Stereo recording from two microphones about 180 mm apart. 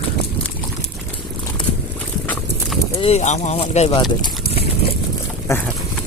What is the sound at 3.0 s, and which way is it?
Speech, 40° left (ahead or behind).